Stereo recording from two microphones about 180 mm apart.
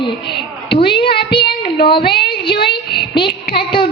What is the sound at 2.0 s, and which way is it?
A child's voice, 65° left (ahead or behind).